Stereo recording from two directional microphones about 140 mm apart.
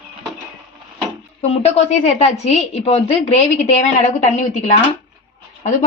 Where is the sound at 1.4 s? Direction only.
50° left (ahead or behind).